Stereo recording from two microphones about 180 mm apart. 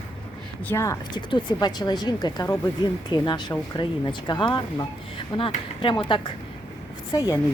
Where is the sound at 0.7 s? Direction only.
15° left (ahead or behind).